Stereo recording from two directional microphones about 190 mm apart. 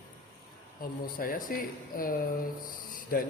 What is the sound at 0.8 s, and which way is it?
A man's voice, 50° left (ahead or behind).